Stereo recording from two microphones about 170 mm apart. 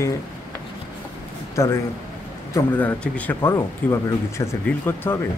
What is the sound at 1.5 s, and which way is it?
Speech, 20° left (ahead or behind).